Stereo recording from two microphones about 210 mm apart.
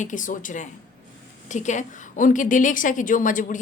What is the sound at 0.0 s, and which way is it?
A woman's voice, 40° left (ahead or behind).